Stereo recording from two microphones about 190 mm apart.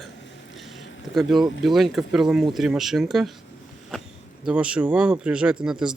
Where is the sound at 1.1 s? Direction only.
Centre (ahead or behind).